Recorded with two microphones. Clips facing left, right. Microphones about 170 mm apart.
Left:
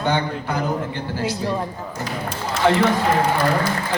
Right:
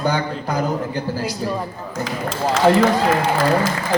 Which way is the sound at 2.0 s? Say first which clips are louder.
Right 5 dB; 90° right.